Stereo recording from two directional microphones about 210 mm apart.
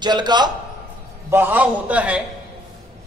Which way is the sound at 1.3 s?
10° right (ahead or behind).